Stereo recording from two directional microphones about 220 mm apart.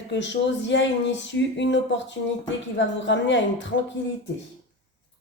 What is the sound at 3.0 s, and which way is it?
Speech, 55° left (ahead or behind).